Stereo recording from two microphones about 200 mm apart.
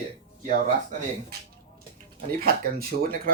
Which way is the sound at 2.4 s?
50° right (ahead or behind).